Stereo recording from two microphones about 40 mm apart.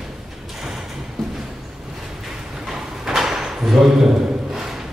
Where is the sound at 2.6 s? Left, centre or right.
Centre.